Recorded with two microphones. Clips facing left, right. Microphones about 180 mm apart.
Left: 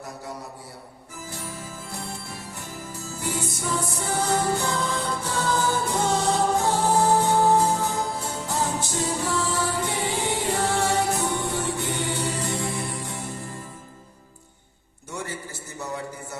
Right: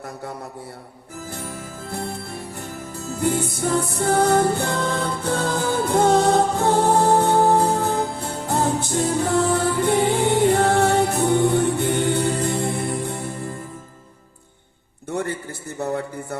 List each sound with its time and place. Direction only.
1.3 s music: 55° right (ahead or behind)
15.1 s a sound: 55° right (ahead or behind)
15.8 s speech: 55° right (ahead or behind)